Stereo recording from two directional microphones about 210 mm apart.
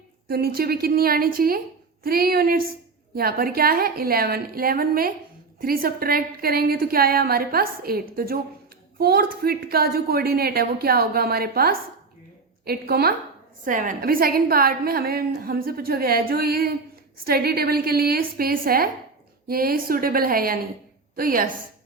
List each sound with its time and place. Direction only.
0.3 s a woman's voice: 45° right (ahead or behind)